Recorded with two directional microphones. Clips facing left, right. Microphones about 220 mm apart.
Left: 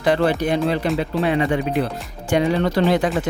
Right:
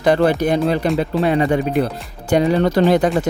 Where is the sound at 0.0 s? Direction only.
45° right (ahead or behind).